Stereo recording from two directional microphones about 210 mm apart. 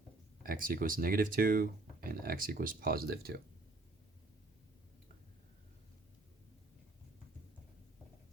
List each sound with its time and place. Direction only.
0.4 s speech: 45° right (ahead or behind)